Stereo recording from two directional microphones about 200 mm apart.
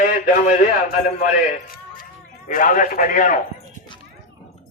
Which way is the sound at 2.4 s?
40° left (ahead or behind).